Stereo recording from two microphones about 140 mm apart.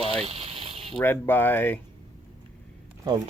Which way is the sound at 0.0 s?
45° right (ahead or behind).